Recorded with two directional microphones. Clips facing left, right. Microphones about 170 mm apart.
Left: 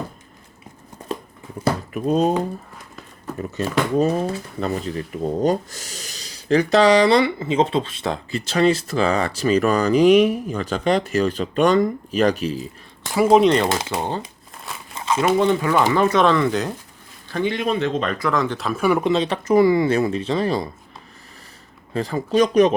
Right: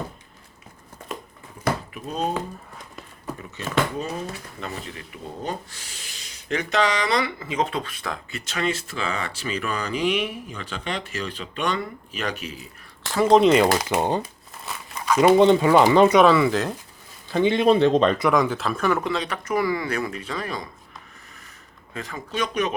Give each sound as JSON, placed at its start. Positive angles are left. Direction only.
{"t": 1.9, "sound": "speech", "side_deg": 45}
{"t": 3.6, "sound": "speech", "side_deg": 40}
{"t": 13.1, "sound": "speech", "side_deg": 10}
{"t": 13.9, "sound": "speech", "side_deg": -15}
{"t": 14.9, "sound": "crumpling", "side_deg": 25}
{"t": 15.2, "sound": "speech", "side_deg": -20}
{"t": 16.2, "sound": "speech", "side_deg": -5}
{"t": 17.3, "sound": "speech", "side_deg": -20}
{"t": 18.3, "sound": "speech", "side_deg": -10}
{"t": 18.5, "sound": "speech", "side_deg": 0}
{"t": 21.9, "sound": "speech", "side_deg": 35}